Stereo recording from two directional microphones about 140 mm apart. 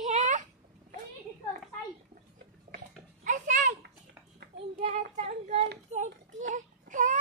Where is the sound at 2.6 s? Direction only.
75° right (ahead or behind).